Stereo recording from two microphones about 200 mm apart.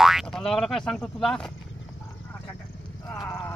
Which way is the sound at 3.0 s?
20° left (ahead or behind).